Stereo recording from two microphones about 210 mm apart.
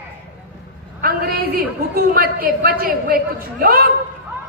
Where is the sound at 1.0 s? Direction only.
45° right (ahead or behind).